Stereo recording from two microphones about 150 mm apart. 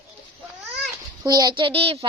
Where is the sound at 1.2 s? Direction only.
25° right (ahead or behind).